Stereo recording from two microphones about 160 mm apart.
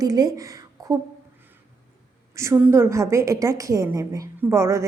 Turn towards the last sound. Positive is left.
turn(degrees=-15)  # may be behind; listen again after turning